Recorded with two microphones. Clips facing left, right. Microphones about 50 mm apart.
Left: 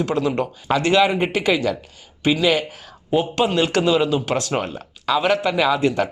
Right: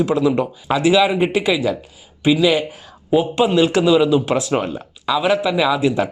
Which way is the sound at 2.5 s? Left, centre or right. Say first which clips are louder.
Right 2 dB; centre.